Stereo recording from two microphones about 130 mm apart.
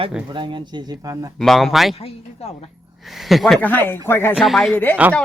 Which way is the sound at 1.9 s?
50° left (ahead or behind).